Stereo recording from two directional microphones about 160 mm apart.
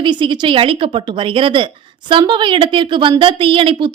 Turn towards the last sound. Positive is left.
turn(degrees=-30)  # may be behind; listen again after turning